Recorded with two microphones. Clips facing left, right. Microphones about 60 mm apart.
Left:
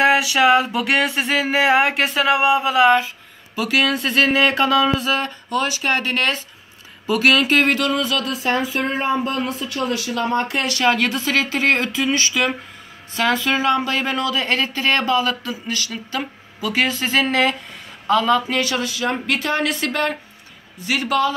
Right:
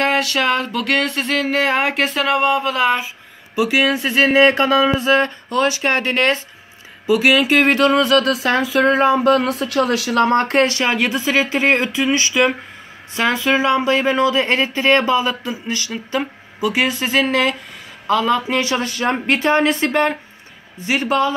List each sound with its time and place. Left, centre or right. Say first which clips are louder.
0.0 s a sound: left 2 dB; centre
3.5 s speech: right 3 dB; centre
5.1 s speech: right 5 dB; right
7.1 s speech: right 2 dB; centre
7.7 s speech: right 6 dB; right
8.0 s speech: right 7 dB; right
8.3 s speech: right 4 dB; right
10.6 s speech: right 2 dB; right; by 18.6 s centre
18.6 s speech: right 2 dB; right
18.9 s speech: right 3 dB; right